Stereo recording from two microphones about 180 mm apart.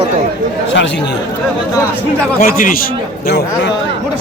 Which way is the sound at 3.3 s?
65° left (ahead or behind).